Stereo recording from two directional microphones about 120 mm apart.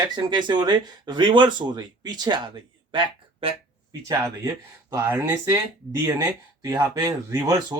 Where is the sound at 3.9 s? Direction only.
30° right (ahead or behind).